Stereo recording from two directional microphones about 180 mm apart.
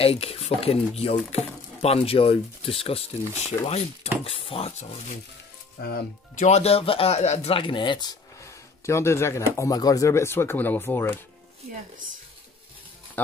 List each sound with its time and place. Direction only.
0.0 s speech: 35° left (ahead or behind)
5.8 s speech: 65° left (ahead or behind)
6.3 s speech: 40° left (ahead or behind); by 11.1 s 10° left (ahead or behind)